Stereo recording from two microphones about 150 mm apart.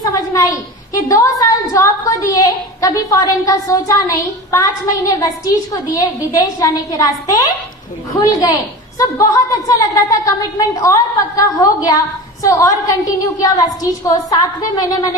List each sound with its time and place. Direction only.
0.0 s a woman's voice: 20° left (ahead or behind)